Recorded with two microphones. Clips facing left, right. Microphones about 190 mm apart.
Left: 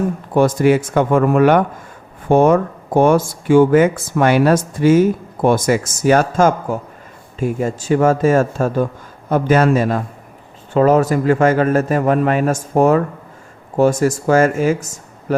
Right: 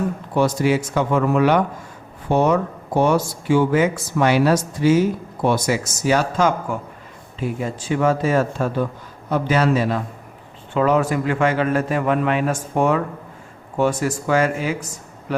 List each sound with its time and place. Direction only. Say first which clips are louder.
0.3 s speech: left 5 dB; 50° left (ahead or behind)